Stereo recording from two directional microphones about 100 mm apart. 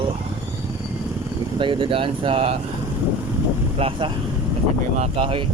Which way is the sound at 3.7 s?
70° right (ahead or behind).